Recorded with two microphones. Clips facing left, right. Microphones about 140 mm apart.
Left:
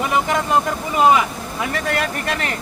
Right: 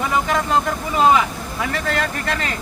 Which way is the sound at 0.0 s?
15° left (ahead or behind).